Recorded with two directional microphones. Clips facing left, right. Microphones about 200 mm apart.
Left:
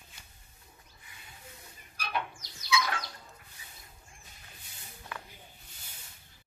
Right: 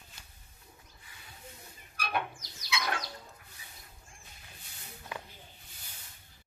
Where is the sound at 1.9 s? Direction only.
55° right (ahead or behind).